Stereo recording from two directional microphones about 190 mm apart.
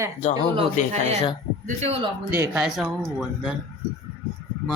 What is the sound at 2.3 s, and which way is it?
A woman's voice, 10° right (ahead or behind).